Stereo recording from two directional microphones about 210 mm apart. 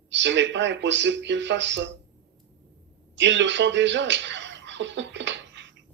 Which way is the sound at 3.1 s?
60° right (ahead or behind).